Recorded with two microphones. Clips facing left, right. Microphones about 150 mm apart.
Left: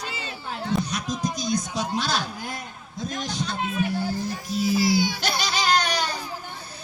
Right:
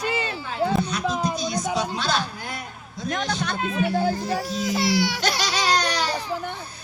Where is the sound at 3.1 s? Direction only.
70° right (ahead or behind); by 5.5 s 90° right.